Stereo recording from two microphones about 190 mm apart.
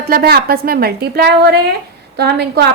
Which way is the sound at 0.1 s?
55° right (ahead or behind).